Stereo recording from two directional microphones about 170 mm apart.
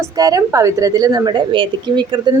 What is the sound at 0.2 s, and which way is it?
A woman's voice, 20° right (ahead or behind).